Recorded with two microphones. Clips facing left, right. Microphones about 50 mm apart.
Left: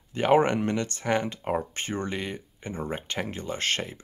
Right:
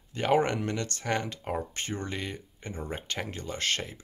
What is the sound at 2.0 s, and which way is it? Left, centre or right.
Speech, centre.